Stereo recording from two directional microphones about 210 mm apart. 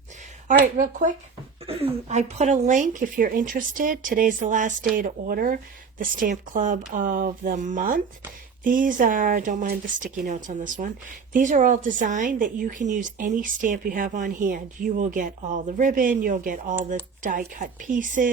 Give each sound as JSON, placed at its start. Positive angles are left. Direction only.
{"t": 0.4, "sound": "a woman's voice", "side_deg": -40}
{"t": 1.6, "sound": "a woman's voice", "side_deg": -25}